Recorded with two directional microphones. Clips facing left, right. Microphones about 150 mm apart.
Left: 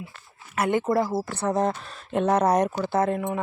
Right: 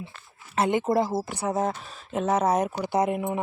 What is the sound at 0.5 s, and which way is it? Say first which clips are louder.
Speech: even; 20° right (ahead or behind).